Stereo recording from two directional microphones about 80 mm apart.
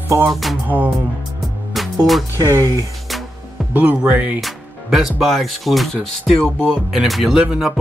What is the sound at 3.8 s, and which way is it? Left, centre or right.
Speech, right.